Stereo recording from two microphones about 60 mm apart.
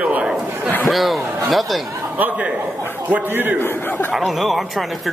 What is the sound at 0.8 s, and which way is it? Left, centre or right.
A man's voice, centre.